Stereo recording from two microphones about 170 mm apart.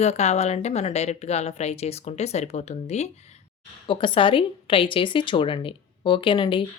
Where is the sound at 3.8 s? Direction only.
30° left (ahead or behind).